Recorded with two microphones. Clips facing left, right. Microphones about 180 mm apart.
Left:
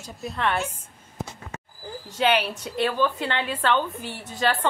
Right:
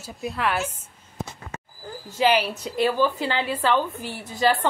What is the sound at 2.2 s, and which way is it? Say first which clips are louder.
A woman's voice: right 2 dB; 5° right (ahead or behind).